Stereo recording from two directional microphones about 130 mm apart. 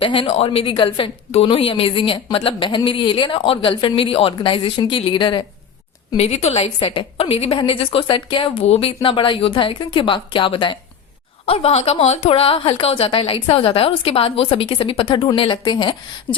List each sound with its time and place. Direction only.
0.0 s a woman's voice: 45° left (ahead or behind)
6.1 s a woman's voice: 55° left (ahead or behind)
11.4 s a woman's voice: 50° left (ahead or behind)